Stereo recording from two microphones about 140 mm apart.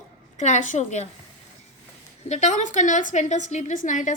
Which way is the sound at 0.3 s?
60° left (ahead or behind).